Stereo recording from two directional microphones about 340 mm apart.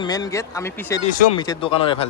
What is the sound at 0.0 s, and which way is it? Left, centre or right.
A man's voice, centre.